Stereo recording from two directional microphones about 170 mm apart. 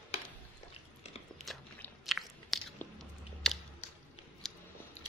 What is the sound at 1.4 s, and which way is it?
Biting, 5° left (ahead or behind).